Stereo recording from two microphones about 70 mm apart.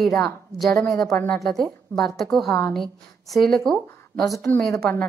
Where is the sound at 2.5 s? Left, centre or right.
Centre.